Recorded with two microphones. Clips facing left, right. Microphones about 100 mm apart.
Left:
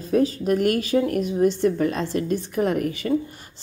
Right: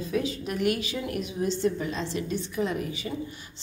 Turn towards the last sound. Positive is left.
turn(degrees=55)  # may be behind; listen again after turning